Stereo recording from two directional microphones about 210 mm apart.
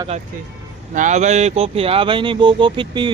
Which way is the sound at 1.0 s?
35° right (ahead or behind).